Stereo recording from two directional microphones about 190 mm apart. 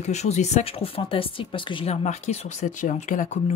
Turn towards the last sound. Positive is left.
turn(degrees=40)  # may be behind; listen again after turning